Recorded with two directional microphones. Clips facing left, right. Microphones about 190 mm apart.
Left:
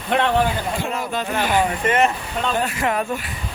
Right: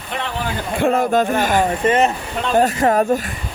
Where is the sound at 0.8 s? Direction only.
55° right (ahead or behind).